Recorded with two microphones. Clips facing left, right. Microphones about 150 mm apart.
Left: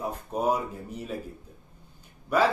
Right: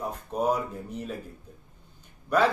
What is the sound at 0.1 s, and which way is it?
A man's voice, 10° left (ahead or behind).